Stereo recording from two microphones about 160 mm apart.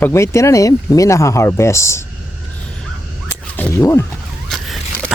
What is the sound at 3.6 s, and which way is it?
Speech, 15° left (ahead or behind).